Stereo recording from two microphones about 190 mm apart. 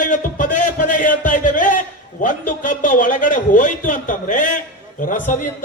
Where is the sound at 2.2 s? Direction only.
45° left (ahead or behind).